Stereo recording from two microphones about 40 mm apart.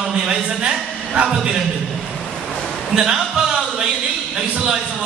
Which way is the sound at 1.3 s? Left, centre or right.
Centre.